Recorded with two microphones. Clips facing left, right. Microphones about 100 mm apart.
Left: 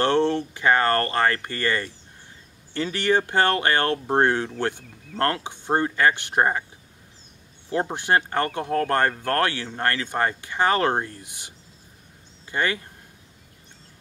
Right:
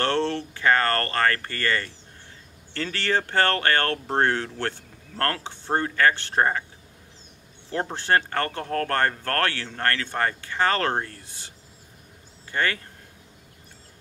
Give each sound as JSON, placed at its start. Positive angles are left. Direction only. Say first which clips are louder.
{"t": 0.0, "sound": "speech", "louder": "left 4 dB", "side_deg": 15}
{"t": 7.7, "sound": "speech", "louder": "left 1 dB", "side_deg": 15}